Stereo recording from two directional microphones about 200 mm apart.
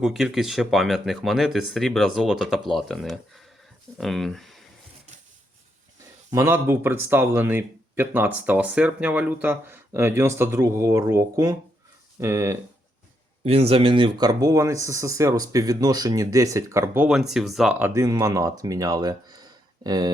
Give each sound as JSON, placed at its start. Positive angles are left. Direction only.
{"t": 0.0, "sound": "speech", "side_deg": 0}
{"t": 6.3, "sound": "speech", "side_deg": -10}
{"t": 13.4, "sound": "speech", "side_deg": -30}